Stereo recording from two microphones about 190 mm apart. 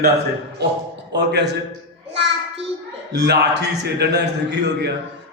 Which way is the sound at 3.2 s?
60° right (ahead or behind).